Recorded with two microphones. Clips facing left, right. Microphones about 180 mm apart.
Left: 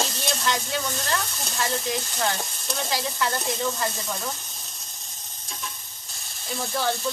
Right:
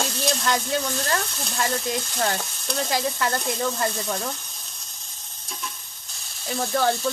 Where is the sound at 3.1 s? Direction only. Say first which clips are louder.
Right 1 dB; centre (ahead or behind).